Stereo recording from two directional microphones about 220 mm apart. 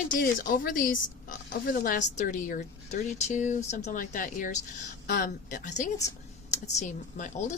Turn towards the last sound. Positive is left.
turn(degrees=35)  # may be behind; listen again after turning